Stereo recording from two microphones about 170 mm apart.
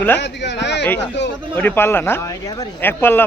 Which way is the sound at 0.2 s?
90° left.